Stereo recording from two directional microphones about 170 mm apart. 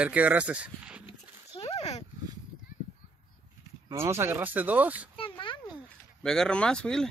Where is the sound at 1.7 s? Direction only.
40° left (ahead or behind).